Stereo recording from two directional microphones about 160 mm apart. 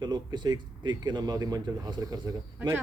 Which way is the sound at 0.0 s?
25° right (ahead or behind).